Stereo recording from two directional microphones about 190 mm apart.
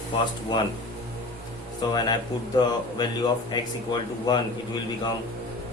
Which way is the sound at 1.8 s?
25° left (ahead or behind).